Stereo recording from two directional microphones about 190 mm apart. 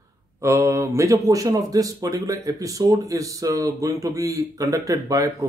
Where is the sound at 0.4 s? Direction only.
15° right (ahead or behind).